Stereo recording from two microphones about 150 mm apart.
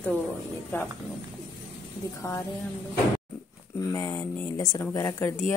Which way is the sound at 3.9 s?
15° left (ahead or behind).